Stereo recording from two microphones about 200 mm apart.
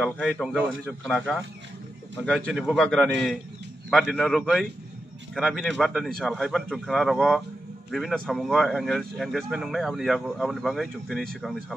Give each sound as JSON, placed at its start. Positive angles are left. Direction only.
{"t": 0.0, "sound": "speech", "side_deg": 5}